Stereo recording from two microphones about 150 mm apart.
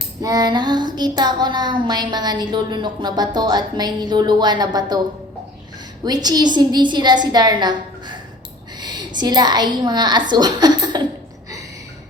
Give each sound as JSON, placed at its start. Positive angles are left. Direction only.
{"t": 0.2, "sound": "child singing", "side_deg": -25}
{"t": 6.1, "sound": "child singing", "side_deg": -25}
{"t": 8.8, "sound": "a woman's voice", "side_deg": -30}